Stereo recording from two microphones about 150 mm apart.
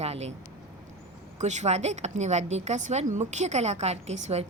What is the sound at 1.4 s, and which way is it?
A woman's voice, 50° right (ahead or behind).